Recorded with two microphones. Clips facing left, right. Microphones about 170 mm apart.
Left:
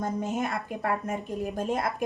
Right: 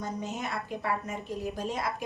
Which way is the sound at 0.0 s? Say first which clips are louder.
Left 6 dB; 50° left (ahead or behind).